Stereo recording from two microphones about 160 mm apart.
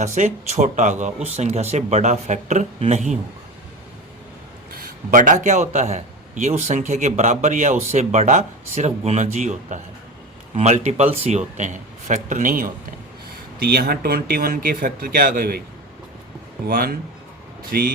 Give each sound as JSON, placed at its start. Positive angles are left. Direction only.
{"t": 0.0, "sound": "a man's voice", "side_deg": -50}
{"t": 4.7, "sound": "a man's voice", "side_deg": -60}
{"t": 13.6, "sound": "speech", "side_deg": -75}
{"t": 16.6, "sound": "speech", "side_deg": -70}